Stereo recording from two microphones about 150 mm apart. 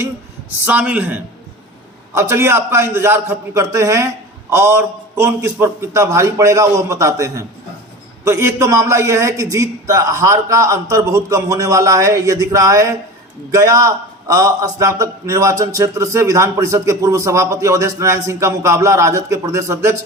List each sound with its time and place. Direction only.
0.6 s a man's voice: 10° right (ahead or behind)